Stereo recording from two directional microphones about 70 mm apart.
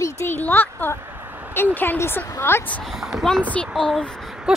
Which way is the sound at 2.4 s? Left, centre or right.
Left.